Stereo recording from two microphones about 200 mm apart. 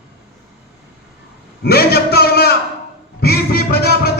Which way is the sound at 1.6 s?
50° left (ahead or behind).